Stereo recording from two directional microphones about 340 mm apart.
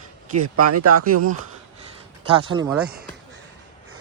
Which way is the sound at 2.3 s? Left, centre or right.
Centre.